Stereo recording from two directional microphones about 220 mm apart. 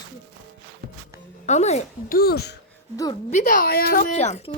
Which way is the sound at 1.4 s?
30° left (ahead or behind).